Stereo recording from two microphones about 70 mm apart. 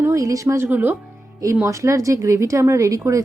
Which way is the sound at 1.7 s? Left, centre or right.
Right.